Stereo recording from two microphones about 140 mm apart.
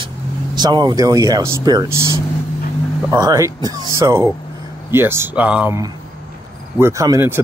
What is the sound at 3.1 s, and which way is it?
Speech, 25° right (ahead or behind).